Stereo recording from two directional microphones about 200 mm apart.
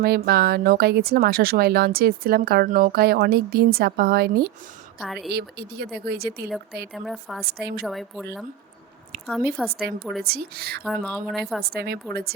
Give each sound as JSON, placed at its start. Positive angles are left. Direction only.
{"t": 0.0, "sound": "speech", "side_deg": -50}
{"t": 4.9, "sound": "a woman's voice", "side_deg": 0}
{"t": 5.3, "sound": "speech", "side_deg": -55}
{"t": 6.9, "sound": "a woman's voice", "side_deg": 0}
{"t": 7.4, "sound": "speech", "side_deg": -55}
{"t": 7.9, "sound": "a woman's voice", "side_deg": 0}
{"t": 9.2, "sound": "a woman's voice", "side_deg": 0}
{"t": 10.2, "sound": "speech", "side_deg": -50}
{"t": 10.8, "sound": "a woman's voice", "side_deg": 5}
{"t": 11.6, "sound": "speech", "side_deg": -50}